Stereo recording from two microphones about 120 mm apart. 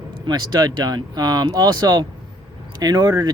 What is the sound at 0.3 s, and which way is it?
Speech, 35° right (ahead or behind).